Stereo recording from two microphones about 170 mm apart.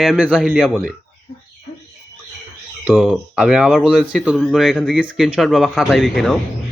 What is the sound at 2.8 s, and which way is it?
A man's voice, 5° right (ahead or behind).